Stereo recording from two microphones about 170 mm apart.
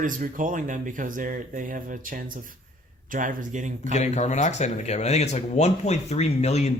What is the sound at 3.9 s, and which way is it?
Speech, 40° left (ahead or behind).